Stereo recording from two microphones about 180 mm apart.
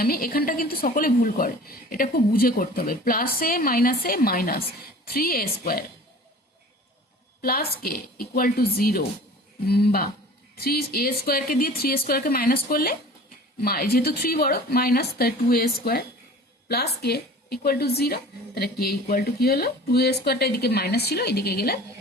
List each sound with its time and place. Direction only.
0.0 s speech: 55° left (ahead or behind)
7.4 s speech: 55° left (ahead or behind)